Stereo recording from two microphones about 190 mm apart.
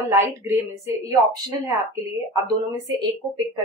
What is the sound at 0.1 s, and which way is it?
Speech, 15° right (ahead or behind).